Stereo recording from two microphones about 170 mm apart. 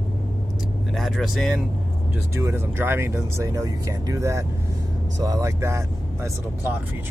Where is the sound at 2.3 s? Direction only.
15° right (ahead or behind).